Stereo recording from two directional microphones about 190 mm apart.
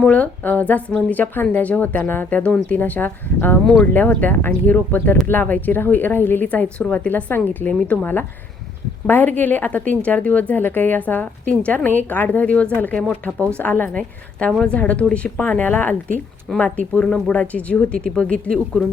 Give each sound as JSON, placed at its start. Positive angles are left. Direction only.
{"t": 0.0, "sound": "speech", "side_deg": 5}